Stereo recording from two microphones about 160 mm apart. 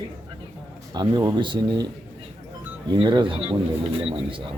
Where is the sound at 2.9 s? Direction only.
30° right (ahead or behind).